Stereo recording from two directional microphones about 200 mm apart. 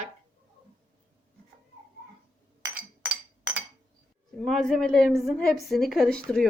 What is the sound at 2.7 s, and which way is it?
Chink, 10° right (ahead or behind).